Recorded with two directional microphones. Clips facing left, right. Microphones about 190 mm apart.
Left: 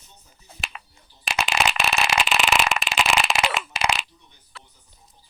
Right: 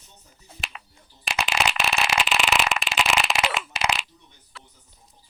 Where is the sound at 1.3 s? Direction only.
45° left (ahead or behind).